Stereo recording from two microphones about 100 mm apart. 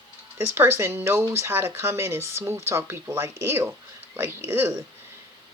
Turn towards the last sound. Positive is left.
turn(degrees=-20)  # may be behind; listen again after turning